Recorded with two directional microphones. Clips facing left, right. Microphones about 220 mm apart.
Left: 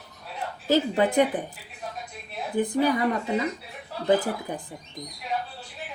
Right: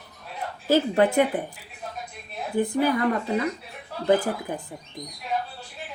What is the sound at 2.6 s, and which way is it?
Speech, 20° left (ahead or behind).